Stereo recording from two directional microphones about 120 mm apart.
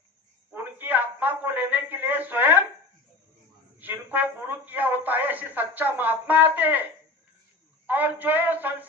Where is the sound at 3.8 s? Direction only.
15° right (ahead or behind).